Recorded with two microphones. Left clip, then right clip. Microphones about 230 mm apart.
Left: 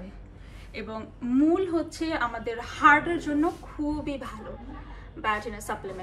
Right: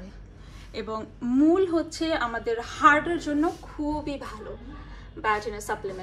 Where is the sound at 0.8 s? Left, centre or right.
Centre.